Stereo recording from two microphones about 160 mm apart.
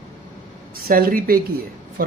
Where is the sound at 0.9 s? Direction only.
65° right (ahead or behind).